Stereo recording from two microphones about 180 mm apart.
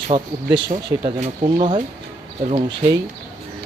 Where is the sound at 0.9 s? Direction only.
25° right (ahead or behind).